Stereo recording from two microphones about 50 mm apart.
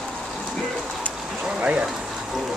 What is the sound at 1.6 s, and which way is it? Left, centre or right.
Speech, right.